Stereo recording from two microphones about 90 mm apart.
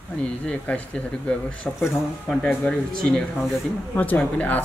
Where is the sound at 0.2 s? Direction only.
15° left (ahead or behind).